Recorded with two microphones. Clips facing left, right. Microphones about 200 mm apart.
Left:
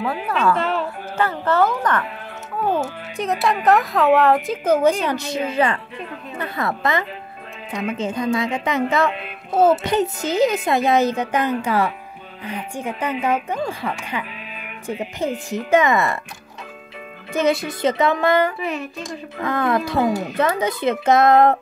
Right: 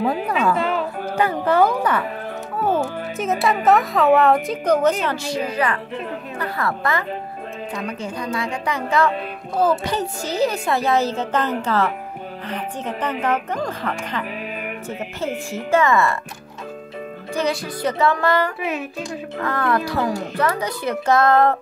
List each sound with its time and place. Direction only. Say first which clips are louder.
0.3 s speech: even; 10° right (ahead or behind)
5.0 s a woman's voice: left 1 dB; 20° left (ahead or behind)
17.3 s a woman's voice: left 4 dB; 20° left (ahead or behind)